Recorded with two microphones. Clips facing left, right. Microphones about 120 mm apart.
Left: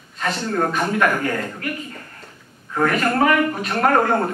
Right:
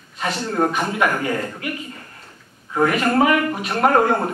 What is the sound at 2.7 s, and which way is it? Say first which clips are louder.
A man's voice: right 1 dB; 10° right (ahead or behind).